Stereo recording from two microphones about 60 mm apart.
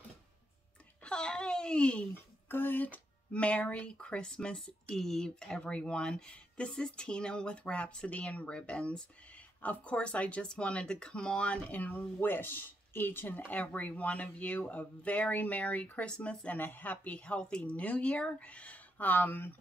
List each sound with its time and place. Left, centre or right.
1.0 s speech: centre
2.1 s speech: left; by 4.9 s centre
4.9 s speech: centre
16.5 s speech: left